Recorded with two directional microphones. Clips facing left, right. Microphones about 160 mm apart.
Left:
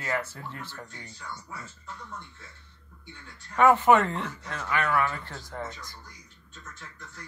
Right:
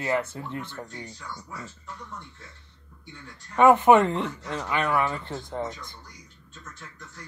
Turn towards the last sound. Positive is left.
turn(degrees=-20)  # may be behind; listen again after turning